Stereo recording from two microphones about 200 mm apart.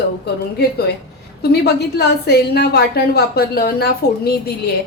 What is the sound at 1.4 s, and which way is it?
A woman's voice, 55° left (ahead or behind).